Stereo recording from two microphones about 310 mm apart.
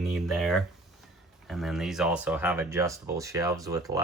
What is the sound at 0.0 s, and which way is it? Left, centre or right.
Speech, centre.